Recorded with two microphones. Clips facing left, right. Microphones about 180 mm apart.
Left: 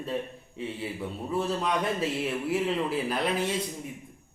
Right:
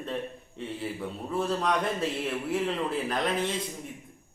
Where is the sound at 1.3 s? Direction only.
5° left (ahead or behind).